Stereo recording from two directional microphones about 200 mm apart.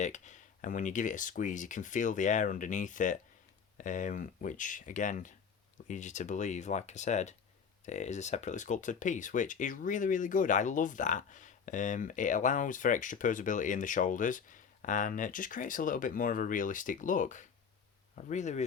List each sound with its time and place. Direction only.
0.0 s speech: 35° left (ahead or behind)